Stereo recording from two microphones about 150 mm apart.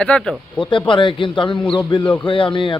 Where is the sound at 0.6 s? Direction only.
35° left (ahead or behind).